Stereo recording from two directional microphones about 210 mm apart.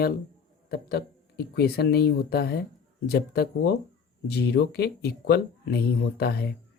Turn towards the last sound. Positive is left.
turn(degrees=50)  # may be behind; listen again after turning